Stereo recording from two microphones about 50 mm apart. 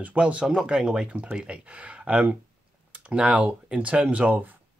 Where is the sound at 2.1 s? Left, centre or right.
Right.